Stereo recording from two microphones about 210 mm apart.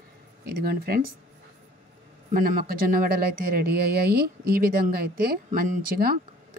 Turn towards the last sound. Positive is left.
turn(degrees=-45)  # may be behind; listen again after turning